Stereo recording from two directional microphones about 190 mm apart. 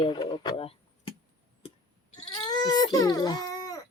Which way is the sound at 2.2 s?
20° left (ahead or behind).